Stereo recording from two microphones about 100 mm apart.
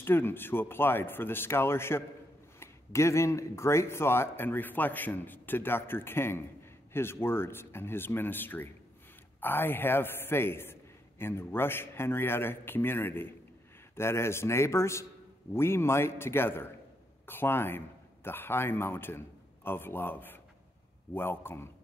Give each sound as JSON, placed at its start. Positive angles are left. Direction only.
{"t": 0.0, "sound": "a man's voice", "side_deg": 20}